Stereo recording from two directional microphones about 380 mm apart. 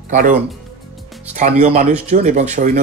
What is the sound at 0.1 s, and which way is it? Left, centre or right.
Speech, centre.